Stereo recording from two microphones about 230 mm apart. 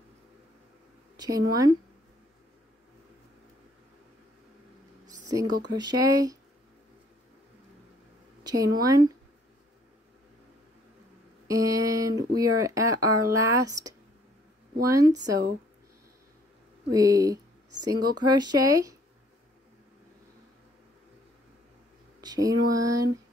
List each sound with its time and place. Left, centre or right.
1.1 s a woman's voice: centre
5.6 s speech: centre
8.5 s speech: centre
11.4 s a sound: centre
12.4 s speech: centre
16.9 s speech: centre
22.2 s speech: centre